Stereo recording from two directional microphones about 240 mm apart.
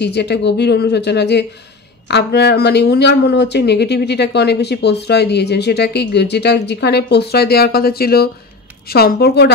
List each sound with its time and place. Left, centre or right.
0.0 s a woman's voice: left